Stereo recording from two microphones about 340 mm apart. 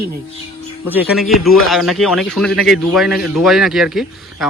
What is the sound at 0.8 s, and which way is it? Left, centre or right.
Speech, centre.